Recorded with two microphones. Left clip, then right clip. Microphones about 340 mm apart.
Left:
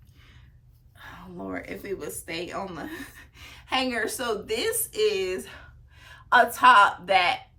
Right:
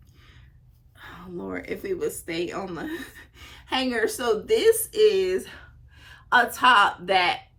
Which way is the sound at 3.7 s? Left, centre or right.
Left.